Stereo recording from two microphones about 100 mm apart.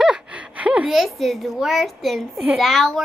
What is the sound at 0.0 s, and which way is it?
Gasp, 10° right (ahead or behind).